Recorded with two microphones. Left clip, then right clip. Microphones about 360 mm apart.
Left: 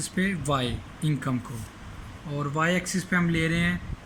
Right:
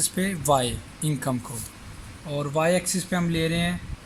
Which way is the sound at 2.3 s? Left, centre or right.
Centre.